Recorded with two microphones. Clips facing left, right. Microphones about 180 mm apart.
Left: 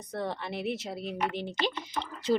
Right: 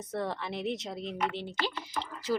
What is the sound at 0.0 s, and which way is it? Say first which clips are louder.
Speech: even; centre (ahead or behind).